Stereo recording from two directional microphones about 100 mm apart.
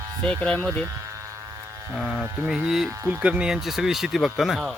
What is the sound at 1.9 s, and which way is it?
Speech, 5° right (ahead or behind).